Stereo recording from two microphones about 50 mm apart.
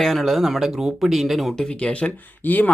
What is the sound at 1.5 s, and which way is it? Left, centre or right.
Speech, centre.